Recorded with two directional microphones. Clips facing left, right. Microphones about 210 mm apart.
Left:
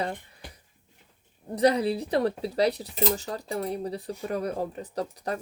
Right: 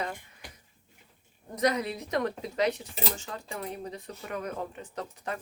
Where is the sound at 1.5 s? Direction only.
30° left (ahead or behind).